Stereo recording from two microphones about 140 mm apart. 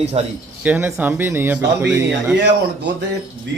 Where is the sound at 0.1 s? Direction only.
45° right (ahead or behind).